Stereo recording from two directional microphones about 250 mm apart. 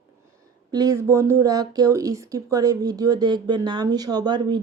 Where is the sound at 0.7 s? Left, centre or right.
Centre.